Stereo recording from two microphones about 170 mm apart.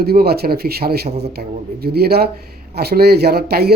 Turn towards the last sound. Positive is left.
turn(degrees=-70)  # may be behind; listen again after turning